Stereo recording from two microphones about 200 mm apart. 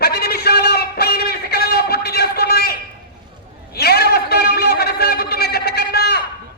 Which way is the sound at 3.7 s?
50° left (ahead or behind).